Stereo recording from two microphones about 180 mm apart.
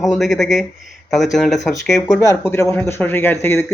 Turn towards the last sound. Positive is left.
turn(degrees=15)  # may be behind; listen again after turning